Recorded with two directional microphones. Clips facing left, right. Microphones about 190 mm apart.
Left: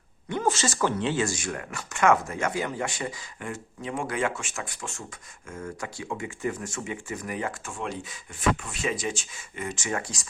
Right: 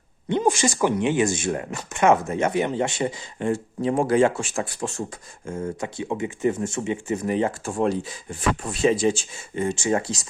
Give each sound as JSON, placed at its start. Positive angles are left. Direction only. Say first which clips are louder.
{"t": 0.3, "sound": "speech", "louder": "right 5 dB", "side_deg": -20}